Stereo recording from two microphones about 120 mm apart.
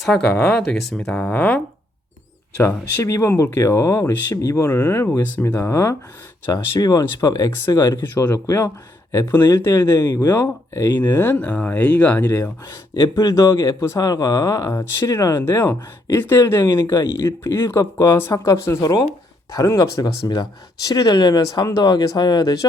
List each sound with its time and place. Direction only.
0.3 s speech: 5° left (ahead or behind); by 6.0 s 20° left (ahead or behind)
6.5 s speech: 30° left (ahead or behind)
8.1 s speech: 15° left (ahead or behind)
10.1 s speech: 35° left (ahead or behind)
10.3 s speech: 15° left (ahead or behind)
13.0 s speech: 30° left (ahead or behind)
15.4 s speech: 15° left (ahead or behind); by 22.5 s 35° left (ahead or behind)